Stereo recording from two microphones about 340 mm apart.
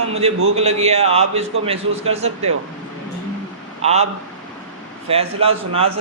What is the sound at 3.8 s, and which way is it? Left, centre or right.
Speech, centre.